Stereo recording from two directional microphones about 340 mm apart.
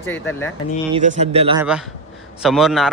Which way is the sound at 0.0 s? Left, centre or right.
Centre.